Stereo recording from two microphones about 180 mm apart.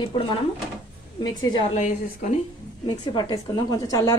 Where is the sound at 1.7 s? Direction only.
40° left (ahead or behind).